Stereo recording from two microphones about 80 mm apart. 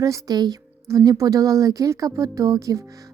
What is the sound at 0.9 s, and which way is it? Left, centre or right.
A woman's voice, right.